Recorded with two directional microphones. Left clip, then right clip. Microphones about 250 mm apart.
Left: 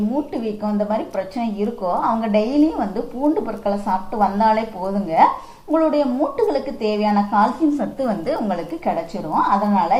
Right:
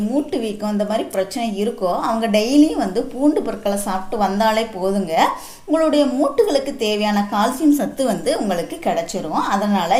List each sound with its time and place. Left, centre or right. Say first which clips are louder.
0.6 s a woman's voice: left 1 dB; right